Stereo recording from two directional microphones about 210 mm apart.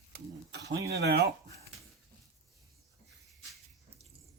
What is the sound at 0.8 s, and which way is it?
Speech, 50° right (ahead or behind).